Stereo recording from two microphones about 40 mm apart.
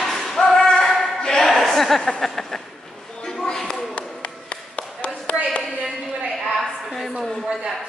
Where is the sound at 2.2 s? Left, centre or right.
Centre.